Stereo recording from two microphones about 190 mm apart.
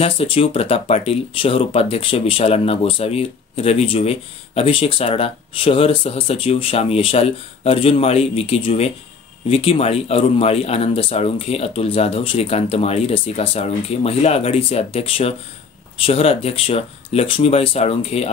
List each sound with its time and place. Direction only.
0.0 s speech: 30° left (ahead or behind)